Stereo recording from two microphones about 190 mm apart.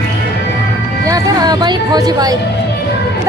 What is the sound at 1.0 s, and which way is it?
Speech, 20° right (ahead or behind).